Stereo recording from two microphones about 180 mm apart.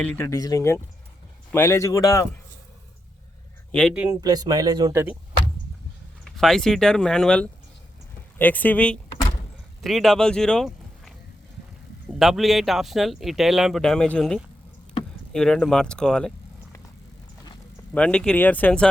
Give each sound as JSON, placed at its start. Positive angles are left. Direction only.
{"t": 0.0, "sound": "speech", "side_deg": 10}
{"t": 3.7, "sound": "speech", "side_deg": 5}
{"t": 3.9, "sound": "speech", "side_deg": -10}
{"t": 6.2, "sound": "speech", "side_deg": 0}
{"t": 17.9, "sound": "speech", "side_deg": 5}